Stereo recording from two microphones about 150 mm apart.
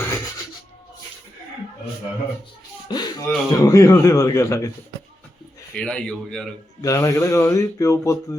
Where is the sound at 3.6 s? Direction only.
20° left (ahead or behind).